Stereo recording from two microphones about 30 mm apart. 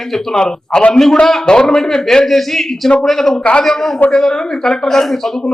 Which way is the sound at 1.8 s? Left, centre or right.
Centre.